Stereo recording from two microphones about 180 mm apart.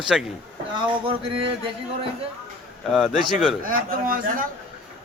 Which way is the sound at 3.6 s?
50° right (ahead or behind).